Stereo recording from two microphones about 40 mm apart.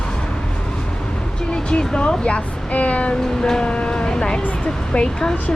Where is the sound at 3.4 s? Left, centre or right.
Left.